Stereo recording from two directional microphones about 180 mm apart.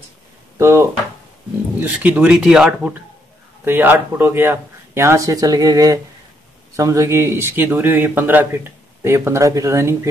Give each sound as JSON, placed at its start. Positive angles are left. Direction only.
{"t": 0.6, "sound": "speech", "side_deg": -15}